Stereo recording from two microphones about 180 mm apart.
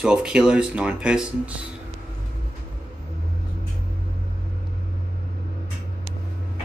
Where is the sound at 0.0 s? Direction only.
5° right (ahead or behind).